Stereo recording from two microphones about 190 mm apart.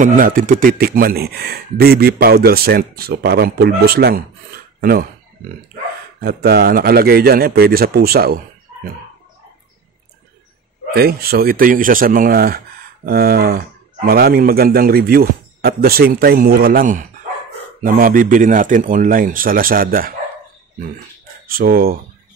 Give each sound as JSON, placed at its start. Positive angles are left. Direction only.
{"t": 0.0, "sound": "speech", "side_deg": -45}
{"t": 6.2, "sound": "speech", "side_deg": -55}
{"t": 10.9, "sound": "speech", "side_deg": -55}
{"t": 21.5, "sound": "speech", "side_deg": -50}